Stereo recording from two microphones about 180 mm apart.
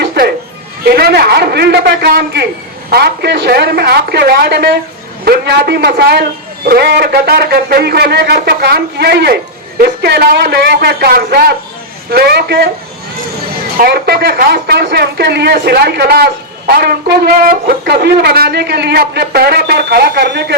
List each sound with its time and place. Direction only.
0.0 s bleat: 60° right (ahead or behind)
0.9 s speech: 60° right (ahead or behind)
13.7 s speech: 60° right (ahead or behind)